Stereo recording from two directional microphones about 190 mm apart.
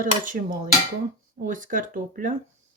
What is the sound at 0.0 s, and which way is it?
Speech, 45° right (ahead or behind).